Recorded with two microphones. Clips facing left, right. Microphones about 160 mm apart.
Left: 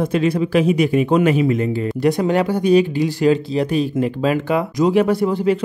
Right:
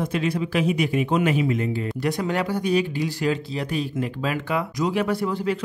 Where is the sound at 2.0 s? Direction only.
20° left (ahead or behind).